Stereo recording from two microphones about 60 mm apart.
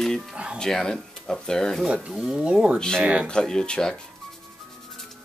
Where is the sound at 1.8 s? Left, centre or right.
Centre.